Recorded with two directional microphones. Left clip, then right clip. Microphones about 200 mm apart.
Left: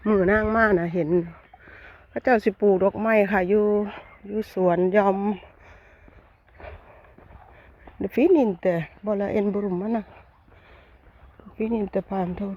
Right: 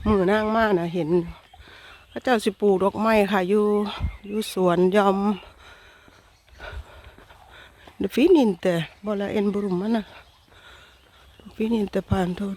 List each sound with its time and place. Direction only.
0.0 s speech: 20° right (ahead or behind)
0.3 s speech: 10° right (ahead or behind)
2.1 s speech: 10° right (ahead or behind); by 5.5 s 30° right (ahead or behind)
7.6 s a sound: 25° right (ahead or behind)
8.4 s speech: 20° right (ahead or behind)
9.6 s speech: 25° right (ahead or behind)
11.5 s speech: 30° right (ahead or behind)